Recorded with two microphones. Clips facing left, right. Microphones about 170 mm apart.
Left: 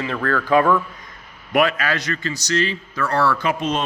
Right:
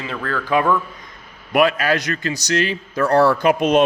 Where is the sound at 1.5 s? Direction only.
40° right (ahead or behind).